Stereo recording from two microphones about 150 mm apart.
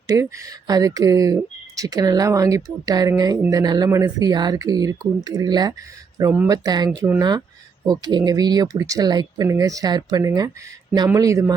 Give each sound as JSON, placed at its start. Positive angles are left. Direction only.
{"t": 0.1, "sound": "speech", "side_deg": -20}